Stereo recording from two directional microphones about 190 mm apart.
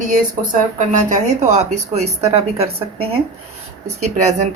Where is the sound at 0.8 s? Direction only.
40° right (ahead or behind).